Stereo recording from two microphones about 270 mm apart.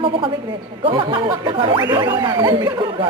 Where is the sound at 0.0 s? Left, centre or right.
Centre.